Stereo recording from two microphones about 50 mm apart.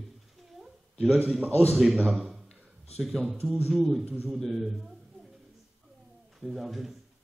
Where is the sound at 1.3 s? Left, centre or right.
Centre.